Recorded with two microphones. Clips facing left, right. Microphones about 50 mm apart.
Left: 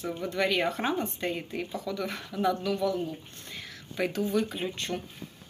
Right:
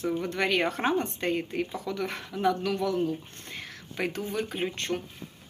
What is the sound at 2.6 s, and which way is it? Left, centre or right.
Speech, right.